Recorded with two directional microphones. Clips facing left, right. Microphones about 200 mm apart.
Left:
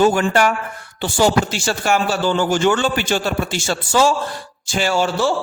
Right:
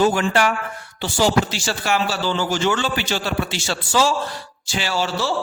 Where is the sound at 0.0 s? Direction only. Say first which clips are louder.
Left 3 dB; 45° left (ahead or behind).